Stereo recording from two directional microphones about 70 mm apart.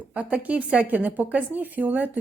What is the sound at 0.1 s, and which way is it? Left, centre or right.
A woman's voice, right.